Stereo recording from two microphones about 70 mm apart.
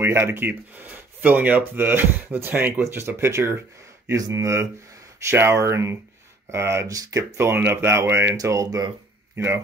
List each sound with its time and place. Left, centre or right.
0.0 s speech: right
6.9 s speech: right
7.3 s speech: right
8.4 s speech: right
8.6 s speech: right
9.3 s speech: right